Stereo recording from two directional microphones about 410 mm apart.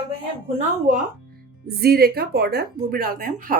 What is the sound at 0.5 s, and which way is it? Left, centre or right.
Speech, centre.